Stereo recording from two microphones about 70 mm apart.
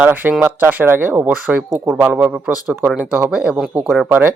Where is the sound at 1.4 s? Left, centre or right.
Centre.